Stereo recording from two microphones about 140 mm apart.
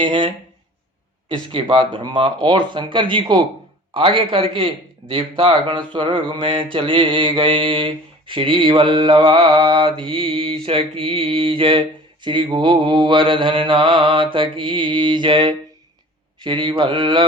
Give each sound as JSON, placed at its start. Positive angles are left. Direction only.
{"t": 0.0, "sound": "mantra", "side_deg": -35}